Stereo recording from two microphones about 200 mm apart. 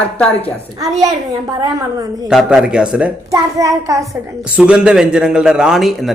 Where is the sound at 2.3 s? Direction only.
5° right (ahead or behind).